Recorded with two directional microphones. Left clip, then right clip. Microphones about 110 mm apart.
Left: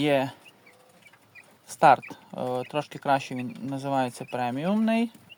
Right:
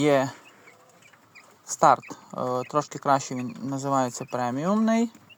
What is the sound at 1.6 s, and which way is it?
Speech, 5° right (ahead or behind).